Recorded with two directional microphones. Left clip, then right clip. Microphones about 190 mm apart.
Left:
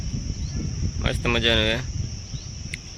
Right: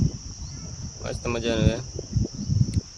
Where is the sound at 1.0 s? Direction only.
5° right (ahead or behind).